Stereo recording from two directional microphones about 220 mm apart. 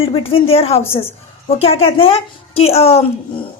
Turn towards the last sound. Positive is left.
turn(degrees=30)  # may be behind; listen again after turning